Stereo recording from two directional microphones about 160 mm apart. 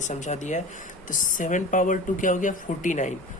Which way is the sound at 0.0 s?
45° left (ahead or behind).